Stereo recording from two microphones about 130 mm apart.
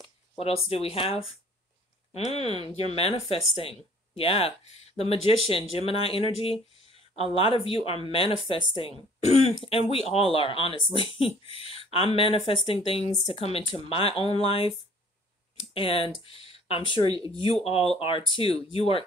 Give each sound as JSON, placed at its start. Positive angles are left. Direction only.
{"t": 0.4, "sound": "speech", "side_deg": 50}
{"t": 15.7, "sound": "speech", "side_deg": 45}
{"t": 17.1, "sound": "speech", "side_deg": -30}
{"t": 17.4, "sound": "speech", "side_deg": 45}